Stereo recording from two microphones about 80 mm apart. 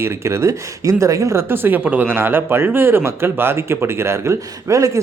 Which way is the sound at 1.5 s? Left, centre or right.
Right.